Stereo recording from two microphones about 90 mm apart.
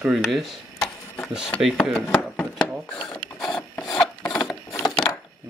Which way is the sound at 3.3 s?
5° left (ahead or behind).